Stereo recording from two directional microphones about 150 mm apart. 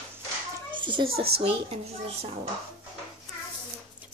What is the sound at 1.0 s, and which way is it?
Speech, 90° right.